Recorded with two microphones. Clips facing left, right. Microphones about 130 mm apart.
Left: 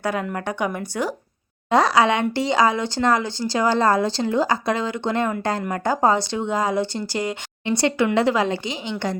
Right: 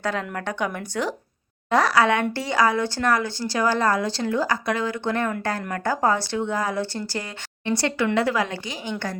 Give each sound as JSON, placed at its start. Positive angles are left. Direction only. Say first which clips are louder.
{"t": 0.0, "sound": "speech", "louder": "left 2 dB", "side_deg": 10}
{"t": 1.7, "sound": "a woman's voice", "louder": "left 2 dB", "side_deg": 20}